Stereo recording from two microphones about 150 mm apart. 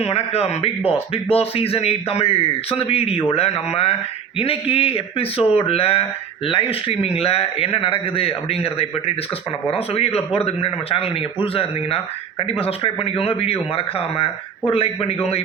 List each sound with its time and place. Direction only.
0.0 s a man's voice: 45° left (ahead or behind)